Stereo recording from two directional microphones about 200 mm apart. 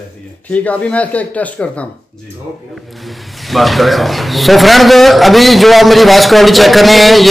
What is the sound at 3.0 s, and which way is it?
A man's voice, centre (ahead or behind).